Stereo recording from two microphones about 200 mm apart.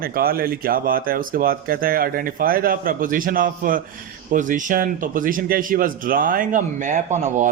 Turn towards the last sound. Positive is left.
turn(degrees=-35)  # may be behind; listen again after turning